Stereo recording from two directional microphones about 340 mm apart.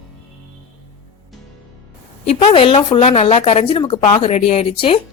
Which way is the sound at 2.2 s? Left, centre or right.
Centre.